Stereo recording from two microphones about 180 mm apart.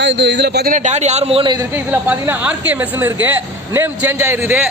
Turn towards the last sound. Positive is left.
turn(degrees=-5)  # may be behind; listen again after turning